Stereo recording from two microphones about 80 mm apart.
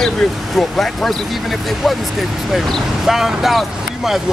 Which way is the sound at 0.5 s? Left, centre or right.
Centre.